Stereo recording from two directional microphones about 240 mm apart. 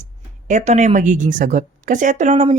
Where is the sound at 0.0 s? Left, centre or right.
Right.